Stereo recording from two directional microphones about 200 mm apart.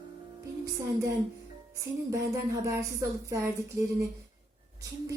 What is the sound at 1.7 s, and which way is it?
A woman's voice, 15° right (ahead or behind).